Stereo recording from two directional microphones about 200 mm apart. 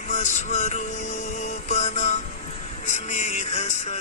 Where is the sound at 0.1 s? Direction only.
35° left (ahead or behind).